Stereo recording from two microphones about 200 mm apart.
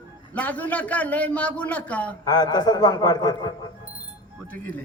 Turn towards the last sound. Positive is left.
turn(degrees=20)  # may be behind; listen again after turning